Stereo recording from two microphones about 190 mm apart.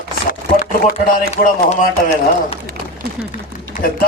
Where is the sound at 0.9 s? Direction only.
35° left (ahead or behind).